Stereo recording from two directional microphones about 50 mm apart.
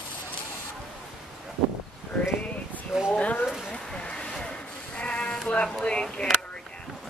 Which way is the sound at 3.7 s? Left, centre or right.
Centre.